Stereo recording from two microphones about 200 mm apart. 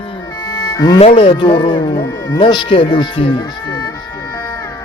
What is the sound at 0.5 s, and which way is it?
Music, 15° left (ahead or behind).